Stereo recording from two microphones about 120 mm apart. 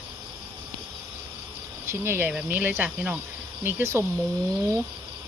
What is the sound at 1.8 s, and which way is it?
Speech, 20° right (ahead or behind).